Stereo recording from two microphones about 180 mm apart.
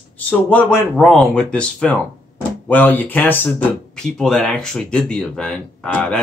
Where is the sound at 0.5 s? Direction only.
5° left (ahead or behind).